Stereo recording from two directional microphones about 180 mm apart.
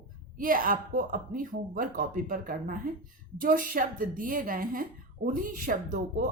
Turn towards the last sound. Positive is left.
turn(degrees=-50)  # may be behind; listen again after turning